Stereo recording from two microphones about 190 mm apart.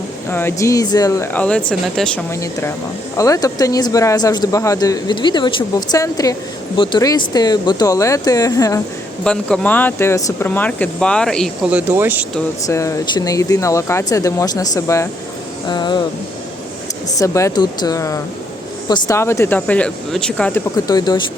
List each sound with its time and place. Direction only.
0.3 s speech: 10° left (ahead or behind)
2.3 s speech: 15° left (ahead or behind)
9.2 s speech: 5° left (ahead or behind)
12.6 s speech: 15° left (ahead or behind)
17.2 s speech: 15° left (ahead or behind)
20.7 s speech: 20° left (ahead or behind)